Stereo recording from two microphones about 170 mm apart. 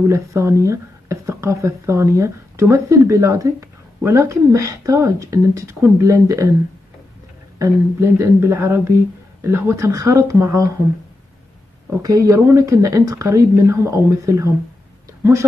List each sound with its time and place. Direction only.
0.1 s speech: 15° right (ahead or behind)
7.5 s speech: 15° right (ahead or behind)
12.0 s speech: 20° right (ahead or behind)